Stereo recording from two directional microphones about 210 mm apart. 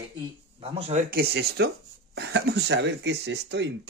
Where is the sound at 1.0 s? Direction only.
50° right (ahead or behind).